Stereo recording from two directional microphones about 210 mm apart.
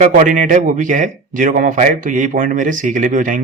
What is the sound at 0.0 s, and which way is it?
Speech, 40° right (ahead or behind).